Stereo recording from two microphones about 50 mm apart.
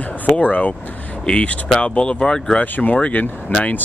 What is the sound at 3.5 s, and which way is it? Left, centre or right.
Speech, left.